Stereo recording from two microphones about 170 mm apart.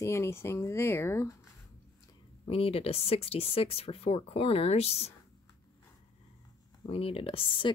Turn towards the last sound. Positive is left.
turn(degrees=30)  # may be behind; listen again after turning